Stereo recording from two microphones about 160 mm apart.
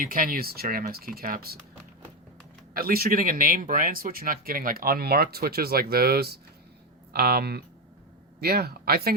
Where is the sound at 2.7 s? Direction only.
70° right (ahead or behind).